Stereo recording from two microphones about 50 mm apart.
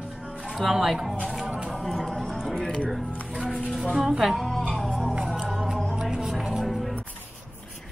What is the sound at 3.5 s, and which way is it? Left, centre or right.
Speech, centre.